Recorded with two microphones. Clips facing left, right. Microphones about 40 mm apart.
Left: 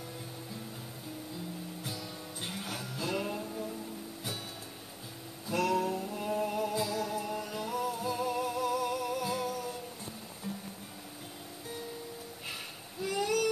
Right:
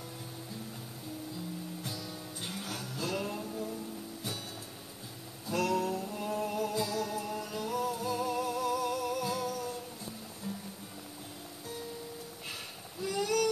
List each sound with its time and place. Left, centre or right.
1.8 s music: centre
5.5 s music: centre
13.0 s a sound: centre